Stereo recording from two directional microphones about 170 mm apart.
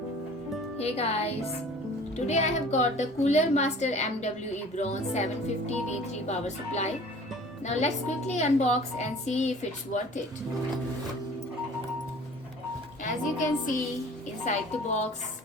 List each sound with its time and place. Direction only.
0.8 s a woman's voice: 35° left (ahead or behind)
13.0 s music: 50° left (ahead or behind)
14.4 s a woman's voice: 45° left (ahead or behind)